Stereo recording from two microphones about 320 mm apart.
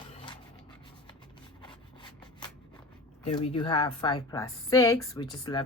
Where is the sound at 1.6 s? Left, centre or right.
Centre.